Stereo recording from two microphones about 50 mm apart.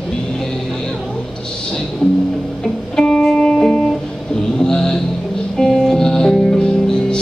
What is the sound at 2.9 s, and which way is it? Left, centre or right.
Music, centre.